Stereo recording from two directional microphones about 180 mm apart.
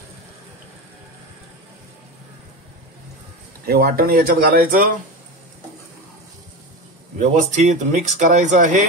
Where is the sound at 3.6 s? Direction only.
55° right (ahead or behind).